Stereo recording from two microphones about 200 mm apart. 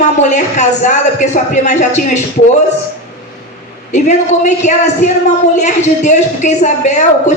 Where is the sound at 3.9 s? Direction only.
35° left (ahead or behind).